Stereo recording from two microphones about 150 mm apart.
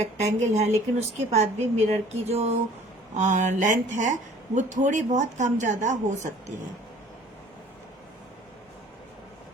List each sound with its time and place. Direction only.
0.0 s speech: 50° right (ahead or behind)